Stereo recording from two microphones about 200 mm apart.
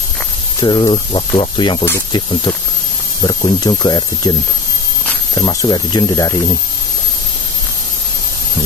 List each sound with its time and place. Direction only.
0.6 s speech: 25° left (ahead or behind)
3.3 s speech: 20° left (ahead or behind)